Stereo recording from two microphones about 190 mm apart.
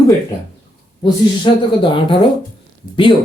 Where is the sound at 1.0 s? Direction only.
25° left (ahead or behind).